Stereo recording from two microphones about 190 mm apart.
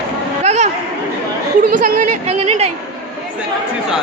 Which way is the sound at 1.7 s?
45° right (ahead or behind).